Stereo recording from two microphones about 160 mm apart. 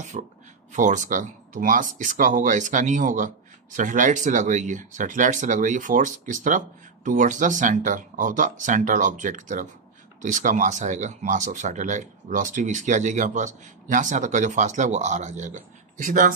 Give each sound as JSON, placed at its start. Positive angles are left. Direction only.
{"t": 0.1, "sound": "speech", "side_deg": -55}